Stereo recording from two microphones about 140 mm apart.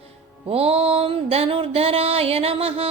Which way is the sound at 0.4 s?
45° right (ahead or behind).